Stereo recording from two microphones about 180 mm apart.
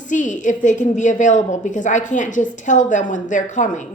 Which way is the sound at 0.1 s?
45° left (ahead or behind).